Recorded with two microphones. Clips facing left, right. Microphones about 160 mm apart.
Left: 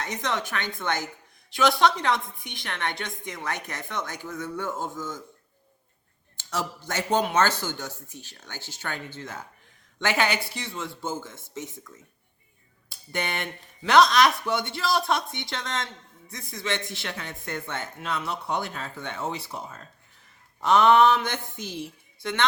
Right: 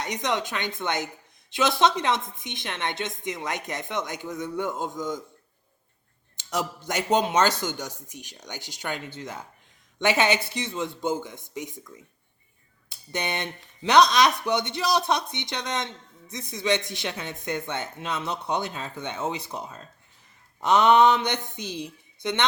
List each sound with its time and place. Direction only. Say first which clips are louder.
0.0 s a man's voice: right 2 dB; 15° right (ahead or behind)
6.3 s a man's voice: right 2 dB; 15° right (ahead or behind)